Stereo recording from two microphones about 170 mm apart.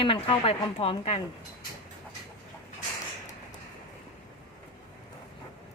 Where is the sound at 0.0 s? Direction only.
30° left (ahead or behind).